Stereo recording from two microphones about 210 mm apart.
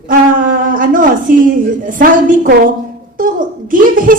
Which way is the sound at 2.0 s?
40° right (ahead or behind).